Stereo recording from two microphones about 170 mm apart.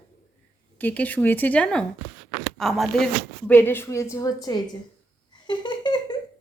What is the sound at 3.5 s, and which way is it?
Speech, 15° left (ahead or behind).